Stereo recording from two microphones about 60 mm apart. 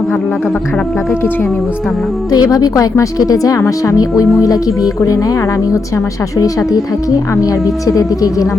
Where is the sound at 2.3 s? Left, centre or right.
Left.